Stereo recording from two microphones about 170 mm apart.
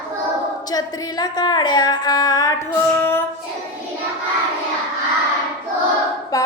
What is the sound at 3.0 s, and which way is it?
Child singing, 10° left (ahead or behind).